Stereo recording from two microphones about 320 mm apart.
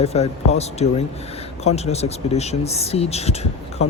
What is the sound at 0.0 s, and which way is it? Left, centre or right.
Speech, centre.